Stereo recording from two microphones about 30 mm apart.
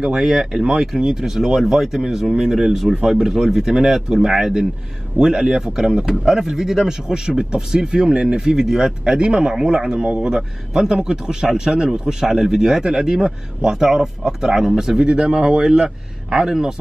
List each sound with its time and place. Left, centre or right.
0.0 s a man's voice: right
0.3 s a man's voice: centre
9.0 s a man's voice: right
15.0 s a man's voice: right